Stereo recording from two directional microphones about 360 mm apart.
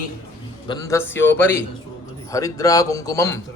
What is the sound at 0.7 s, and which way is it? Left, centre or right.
A man's voice, centre.